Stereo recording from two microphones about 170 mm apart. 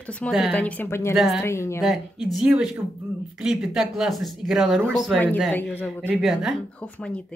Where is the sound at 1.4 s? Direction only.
15° left (ahead or behind).